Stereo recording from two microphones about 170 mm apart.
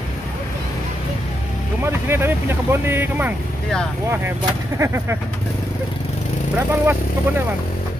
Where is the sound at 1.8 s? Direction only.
15° right (ahead or behind).